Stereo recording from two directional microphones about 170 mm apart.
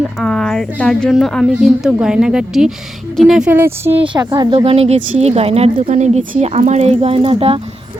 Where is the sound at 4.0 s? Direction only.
30° right (ahead or behind).